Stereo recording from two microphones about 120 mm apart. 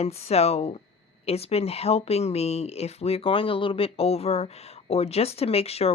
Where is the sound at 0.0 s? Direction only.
60° left (ahead or behind).